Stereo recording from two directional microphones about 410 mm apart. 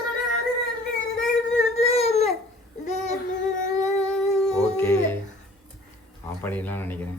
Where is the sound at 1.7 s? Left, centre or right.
Centre.